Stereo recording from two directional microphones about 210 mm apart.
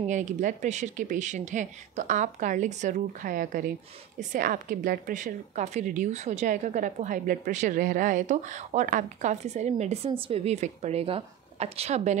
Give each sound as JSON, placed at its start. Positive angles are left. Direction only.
{"t": 0.1, "sound": "a woman's voice", "side_deg": -35}